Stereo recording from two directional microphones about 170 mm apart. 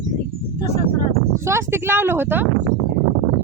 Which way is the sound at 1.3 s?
15° right (ahead or behind).